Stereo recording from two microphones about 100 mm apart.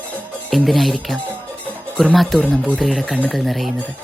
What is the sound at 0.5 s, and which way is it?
Speech, centre (ahead or behind).